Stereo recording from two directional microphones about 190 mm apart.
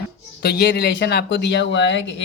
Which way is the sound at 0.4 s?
55° left (ahead or behind).